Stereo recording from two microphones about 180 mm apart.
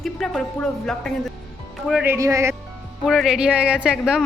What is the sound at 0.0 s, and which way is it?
A woman's voice, 5° left (ahead or behind).